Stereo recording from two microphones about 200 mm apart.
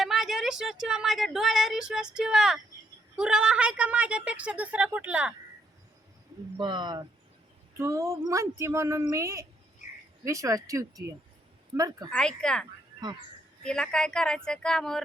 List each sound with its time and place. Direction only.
0.0 s a woman's voice: centre (ahead or behind)
6.6 s a woman's voice: 20° right (ahead or behind)
12.1 s a woman's voice: 5° left (ahead or behind)
13.7 s a woman's voice: 5° left (ahead or behind)